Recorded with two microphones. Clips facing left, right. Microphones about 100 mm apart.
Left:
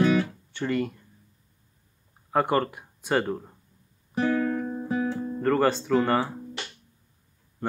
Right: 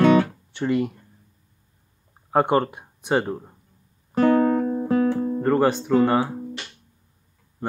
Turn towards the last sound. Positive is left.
turn(degrees=-15)  # may be behind; listen again after turning